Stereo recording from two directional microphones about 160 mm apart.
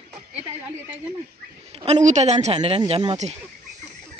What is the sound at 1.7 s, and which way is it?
A woman's voice, 40° right (ahead or behind).